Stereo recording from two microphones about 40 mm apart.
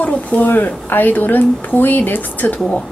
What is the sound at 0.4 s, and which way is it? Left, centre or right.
A woman's voice, left.